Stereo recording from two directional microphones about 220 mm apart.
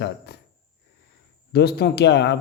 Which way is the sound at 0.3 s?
50° left (ahead or behind).